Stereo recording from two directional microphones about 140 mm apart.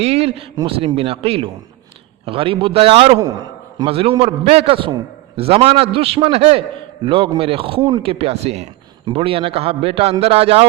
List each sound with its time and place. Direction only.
0.0 s a man's voice: 45° right (ahead or behind)